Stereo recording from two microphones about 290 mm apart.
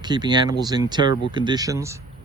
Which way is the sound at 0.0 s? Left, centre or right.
Centre.